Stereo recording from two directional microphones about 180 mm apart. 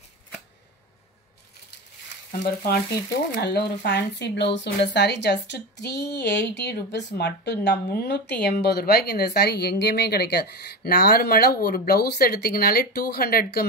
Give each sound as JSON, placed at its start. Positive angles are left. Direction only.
{"t": 2.4, "sound": "speech", "side_deg": 60}